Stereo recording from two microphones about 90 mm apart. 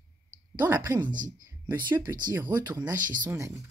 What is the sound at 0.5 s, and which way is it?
Speech, 25° right (ahead or behind).